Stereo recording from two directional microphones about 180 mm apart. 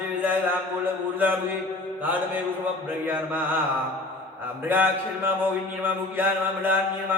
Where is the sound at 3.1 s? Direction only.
10° right (ahead or behind).